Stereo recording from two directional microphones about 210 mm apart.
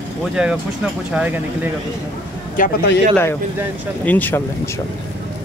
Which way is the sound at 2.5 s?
40° left (ahead or behind).